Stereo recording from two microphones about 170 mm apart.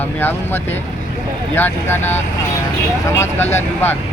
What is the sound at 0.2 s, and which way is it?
Speech, 10° left (ahead or behind).